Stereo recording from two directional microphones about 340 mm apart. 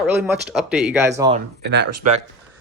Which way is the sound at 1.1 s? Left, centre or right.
Centre.